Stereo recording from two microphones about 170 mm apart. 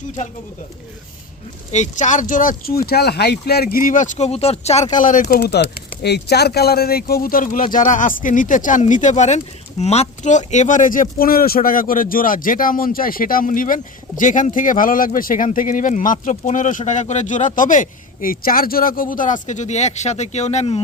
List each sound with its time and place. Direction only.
1.7 s speech: 45° left (ahead or behind)
5.3 s speech: 70° left (ahead or behind); by 20.8 s 40° left (ahead or behind)